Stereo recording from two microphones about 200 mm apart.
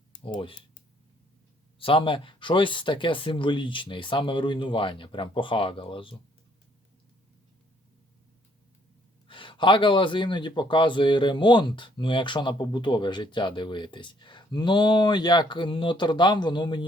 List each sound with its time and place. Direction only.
0.3 s speech: 25° left (ahead or behind)
1.8 s speech: 25° left (ahead or behind)
9.2 s speech: 25° left (ahead or behind)